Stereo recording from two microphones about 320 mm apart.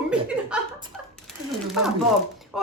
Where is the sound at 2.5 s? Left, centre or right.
Centre.